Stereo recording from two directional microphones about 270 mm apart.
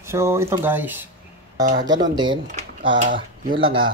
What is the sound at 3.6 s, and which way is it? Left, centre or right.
Speech, right.